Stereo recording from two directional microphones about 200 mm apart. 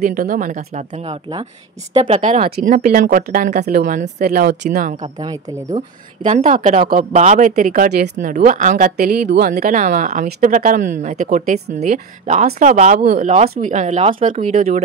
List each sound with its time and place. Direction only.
0.0 s a woman's voice: 45° right (ahead or behind)
5.0 s a woman's voice: 25° right (ahead or behind)
5.8 s a woman's voice: 35° right (ahead or behind)